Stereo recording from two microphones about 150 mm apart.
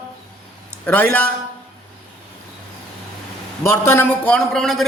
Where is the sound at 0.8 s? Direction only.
10° left (ahead or behind).